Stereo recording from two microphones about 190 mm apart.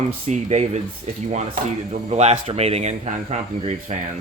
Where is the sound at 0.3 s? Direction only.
35° right (ahead or behind).